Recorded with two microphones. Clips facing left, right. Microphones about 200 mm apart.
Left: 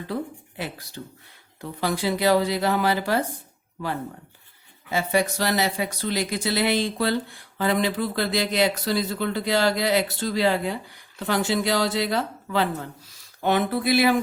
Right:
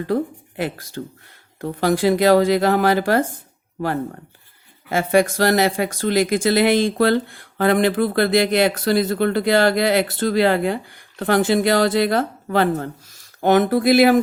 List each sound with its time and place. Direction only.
0.1 s speech: 50° right (ahead or behind)
4.9 s speech: 50° right (ahead or behind)